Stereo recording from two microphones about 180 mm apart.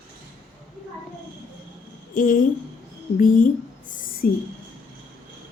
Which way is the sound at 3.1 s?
50° left (ahead or behind).